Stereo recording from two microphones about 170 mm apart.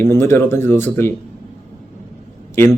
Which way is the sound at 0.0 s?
15° left (ahead or behind).